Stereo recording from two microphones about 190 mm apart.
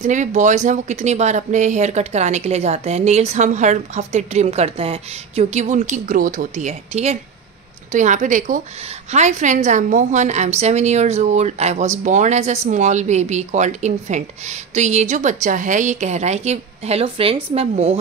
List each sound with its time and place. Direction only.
0.0 s speech: 40° right (ahead or behind)